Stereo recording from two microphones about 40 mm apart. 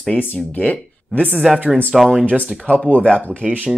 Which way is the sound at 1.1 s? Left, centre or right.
Right.